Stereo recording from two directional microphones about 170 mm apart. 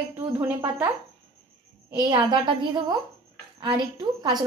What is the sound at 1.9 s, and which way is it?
A woman's voice, 25° right (ahead or behind).